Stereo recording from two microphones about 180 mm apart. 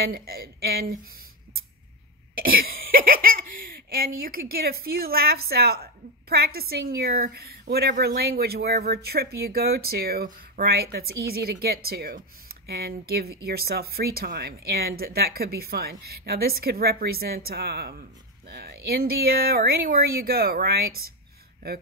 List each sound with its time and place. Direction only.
0.0 s a woman's voice: 60° right (ahead or behind)
2.3 s cough: 55° right (ahead or behind)
3.9 s a woman's voice: 55° right (ahead or behind)